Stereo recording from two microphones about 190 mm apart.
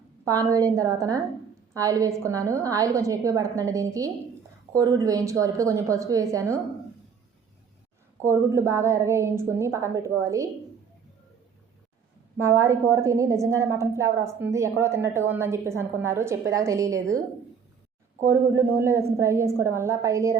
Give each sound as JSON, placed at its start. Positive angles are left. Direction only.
{"t": 0.3, "sound": "a woman's voice", "side_deg": -20}
{"t": 8.2, "sound": "a woman's voice", "side_deg": -15}
{"t": 12.4, "sound": "a woman's voice", "side_deg": -15}
{"t": 18.3, "sound": "a woman's voice", "side_deg": -15}